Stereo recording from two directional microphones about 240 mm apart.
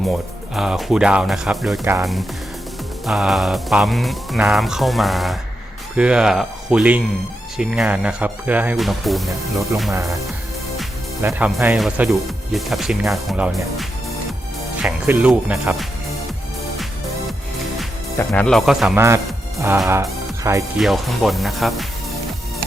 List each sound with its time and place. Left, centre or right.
0.1 s speech: centre
1.8 s speech: centre
3.1 s speech: centre
10.8 s speech: centre
18.3 s speech: centre
20.7 s speech: centre